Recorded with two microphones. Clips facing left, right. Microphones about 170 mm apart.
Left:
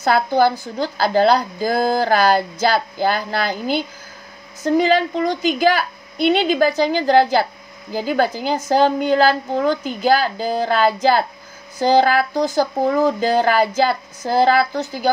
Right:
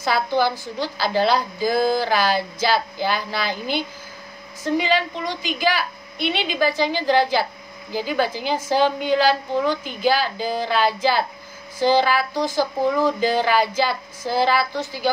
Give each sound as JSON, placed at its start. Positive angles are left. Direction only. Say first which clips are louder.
{"t": 0.0, "sound": "a woman's voice", "louder": "left 5 dB", "side_deg": 50}